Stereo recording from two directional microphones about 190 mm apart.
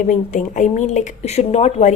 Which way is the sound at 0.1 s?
40° left (ahead or behind).